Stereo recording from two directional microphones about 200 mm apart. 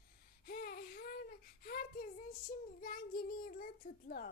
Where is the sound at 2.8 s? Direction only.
45° left (ahead or behind).